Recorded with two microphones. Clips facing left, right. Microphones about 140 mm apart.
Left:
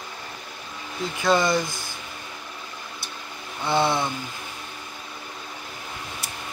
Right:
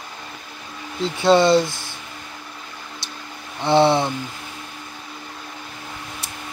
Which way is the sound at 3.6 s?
30° right (ahead or behind).